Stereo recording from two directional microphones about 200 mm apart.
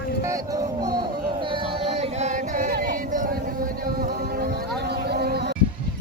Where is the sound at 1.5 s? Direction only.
30° right (ahead or behind); by 3.4 s 45° right (ahead or behind).